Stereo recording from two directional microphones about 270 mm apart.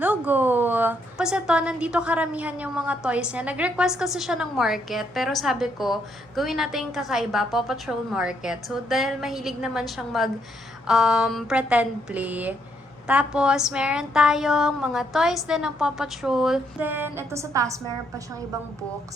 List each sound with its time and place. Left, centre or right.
0.0 s a woman's voice: centre